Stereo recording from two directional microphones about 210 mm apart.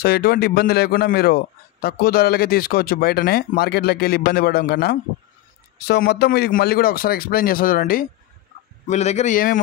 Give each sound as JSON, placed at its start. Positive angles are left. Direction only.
{"t": 0.0, "sound": "a man's voice", "side_deg": 50}